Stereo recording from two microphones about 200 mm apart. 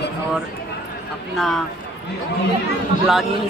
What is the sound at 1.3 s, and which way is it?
Speech, centre (ahead or behind).